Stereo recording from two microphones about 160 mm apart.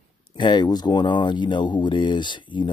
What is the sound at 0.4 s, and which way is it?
Speech, 25° left (ahead or behind).